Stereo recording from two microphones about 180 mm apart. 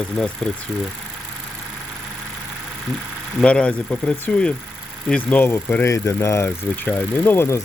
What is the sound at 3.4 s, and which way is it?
Speech, 5° left (ahead or behind).